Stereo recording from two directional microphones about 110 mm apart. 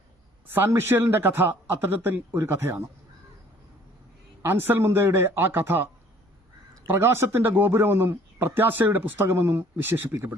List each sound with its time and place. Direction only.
0.4 s speech: 20° right (ahead or behind)
4.4 s speech: 20° right (ahead or behind)